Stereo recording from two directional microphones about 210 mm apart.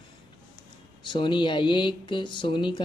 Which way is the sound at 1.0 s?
20° left (ahead or behind).